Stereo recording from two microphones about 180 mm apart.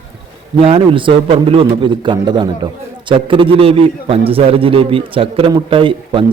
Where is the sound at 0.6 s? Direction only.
30° right (ahead or behind).